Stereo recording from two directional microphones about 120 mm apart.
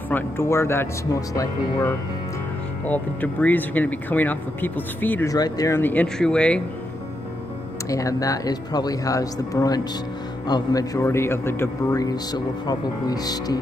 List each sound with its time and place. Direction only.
0.1 s speech: 20° left (ahead or behind)
2.8 s speech: 15° left (ahead or behind)
5.3 s speech: 30° left (ahead or behind)
5.8 s speech: 15° left (ahead or behind)
7.9 s speech: 30° left (ahead or behind)
12.0 s speech: 35° left (ahead or behind)